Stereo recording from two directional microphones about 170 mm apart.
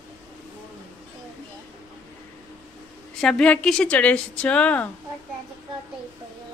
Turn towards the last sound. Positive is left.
turn(degrees=10)  # may be behind; listen again after turning